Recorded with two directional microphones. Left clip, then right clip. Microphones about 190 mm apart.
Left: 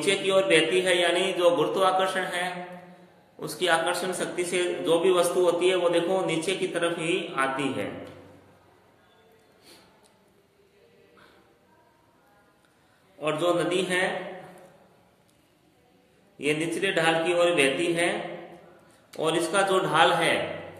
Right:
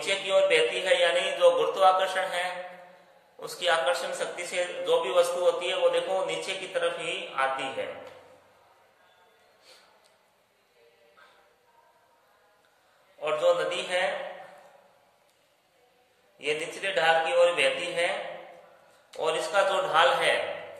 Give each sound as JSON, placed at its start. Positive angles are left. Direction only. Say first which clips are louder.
{"t": 0.0, "sound": "a man's voice", "louder": "left 1 dB", "side_deg": 20}
{"t": 13.2, "sound": "a man's voice", "louder": "even", "side_deg": 25}
{"t": 16.3, "sound": "a man's voice", "louder": "left 4 dB", "side_deg": 25}